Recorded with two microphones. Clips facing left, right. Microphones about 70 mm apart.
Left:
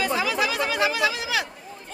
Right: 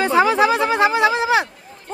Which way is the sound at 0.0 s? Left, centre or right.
Right.